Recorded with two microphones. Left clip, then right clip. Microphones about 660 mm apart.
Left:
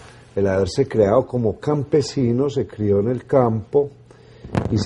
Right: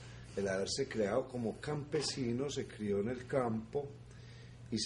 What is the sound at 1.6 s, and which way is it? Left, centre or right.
Speech, left.